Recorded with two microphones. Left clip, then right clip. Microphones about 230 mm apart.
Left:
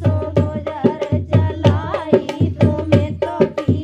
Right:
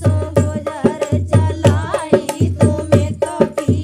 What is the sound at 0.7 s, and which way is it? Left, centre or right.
Music, right.